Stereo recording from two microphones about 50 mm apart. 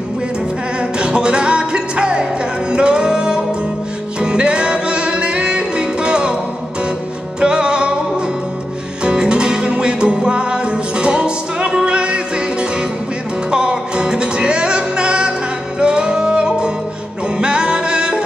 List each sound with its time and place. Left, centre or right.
0.7 s music: centre
7.3 s music: centre
9.0 s music: centre